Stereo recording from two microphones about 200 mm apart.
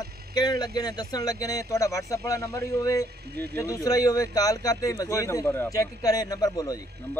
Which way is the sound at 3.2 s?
55° right (ahead or behind).